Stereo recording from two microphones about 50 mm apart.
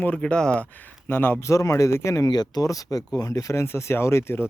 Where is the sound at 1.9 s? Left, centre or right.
Left.